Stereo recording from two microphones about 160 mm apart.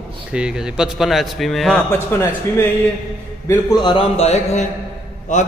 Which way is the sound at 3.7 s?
30° left (ahead or behind).